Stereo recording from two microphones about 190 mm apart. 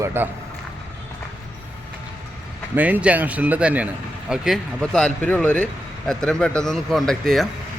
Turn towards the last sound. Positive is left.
turn(degrees=0)  # may be behind; listen again after turning